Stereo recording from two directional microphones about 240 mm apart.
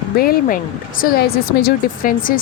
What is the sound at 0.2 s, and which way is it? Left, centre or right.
Speech, left.